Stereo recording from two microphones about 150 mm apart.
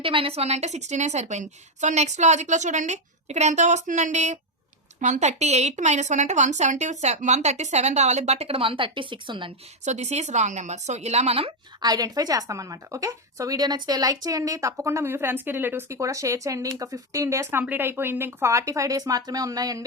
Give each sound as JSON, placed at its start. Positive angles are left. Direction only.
{"t": 0.0, "sound": "speech", "side_deg": -35}
{"t": 9.8, "sound": "speech", "side_deg": -50}
{"t": 11.8, "sound": "speech", "side_deg": -25}